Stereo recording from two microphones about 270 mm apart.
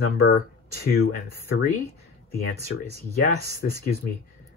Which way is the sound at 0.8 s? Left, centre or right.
Left.